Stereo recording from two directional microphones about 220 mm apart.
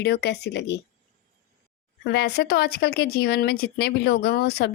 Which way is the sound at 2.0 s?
50° left (ahead or behind).